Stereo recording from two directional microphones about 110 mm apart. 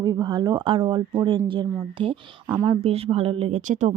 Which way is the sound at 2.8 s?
65° right (ahead or behind).